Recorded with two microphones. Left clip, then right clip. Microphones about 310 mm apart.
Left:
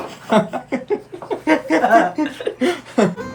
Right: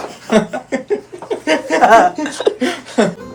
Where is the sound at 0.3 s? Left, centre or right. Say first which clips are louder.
Right 2 dB; centre.